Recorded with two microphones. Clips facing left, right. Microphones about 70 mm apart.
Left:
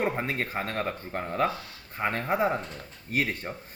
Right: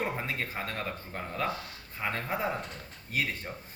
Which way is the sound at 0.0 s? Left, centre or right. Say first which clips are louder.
Left 5 dB; left.